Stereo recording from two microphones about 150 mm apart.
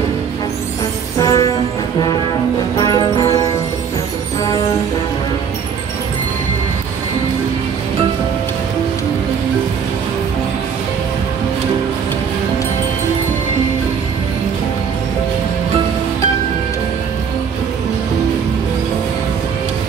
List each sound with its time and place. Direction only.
1.2 s music: 25° left (ahead or behind)
2.8 s music: 25° left (ahead or behind)